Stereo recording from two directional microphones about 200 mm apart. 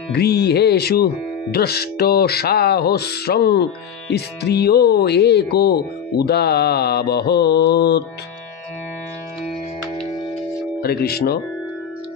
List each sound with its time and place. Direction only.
0.1 s speech: 55° left (ahead or behind)
10.8 s speech: 50° left (ahead or behind)